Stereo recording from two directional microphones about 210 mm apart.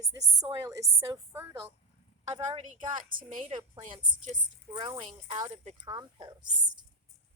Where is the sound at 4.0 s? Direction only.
20° right (ahead or behind).